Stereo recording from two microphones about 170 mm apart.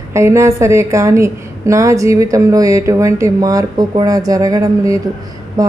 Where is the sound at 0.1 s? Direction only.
15° right (ahead or behind).